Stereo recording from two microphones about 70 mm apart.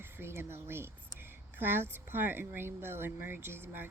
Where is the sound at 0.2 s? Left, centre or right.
Right.